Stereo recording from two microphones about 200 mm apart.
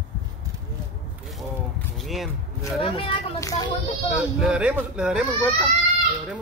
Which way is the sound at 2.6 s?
25° left (ahead or behind).